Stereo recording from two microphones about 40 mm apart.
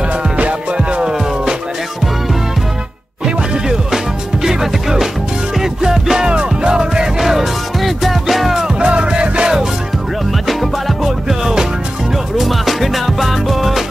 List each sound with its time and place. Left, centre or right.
0.4 s music: right
3.6 s music: centre
7.2 s music: centre
8.7 s music: right
10.4 s music: centre